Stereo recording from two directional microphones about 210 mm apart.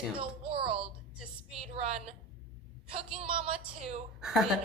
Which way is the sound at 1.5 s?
30° right (ahead or behind).